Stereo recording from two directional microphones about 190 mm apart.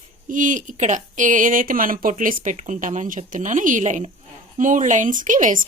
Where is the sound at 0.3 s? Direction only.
45° right (ahead or behind).